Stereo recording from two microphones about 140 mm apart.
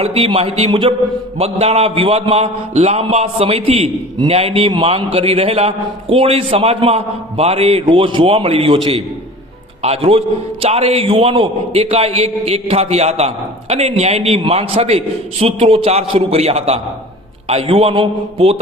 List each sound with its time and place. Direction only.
0.0 s a man's voice: 45° right (ahead or behind)